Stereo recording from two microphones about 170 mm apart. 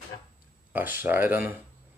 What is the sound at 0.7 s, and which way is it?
Speech, 10° right (ahead or behind).